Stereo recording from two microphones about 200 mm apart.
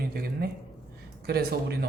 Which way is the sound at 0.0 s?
50° right (ahead or behind).